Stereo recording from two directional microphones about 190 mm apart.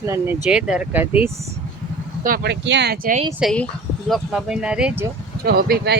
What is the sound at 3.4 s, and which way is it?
Speech, centre (ahead or behind).